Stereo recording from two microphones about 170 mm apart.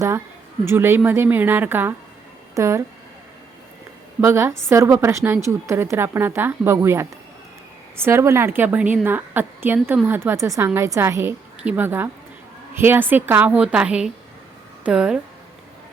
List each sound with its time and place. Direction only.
0.7 s a woman's voice: 15° right (ahead or behind)
4.2 s a woman's voice: 15° right (ahead or behind)